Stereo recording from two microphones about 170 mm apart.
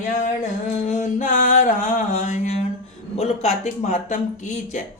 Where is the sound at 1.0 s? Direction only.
45° left (ahead or behind).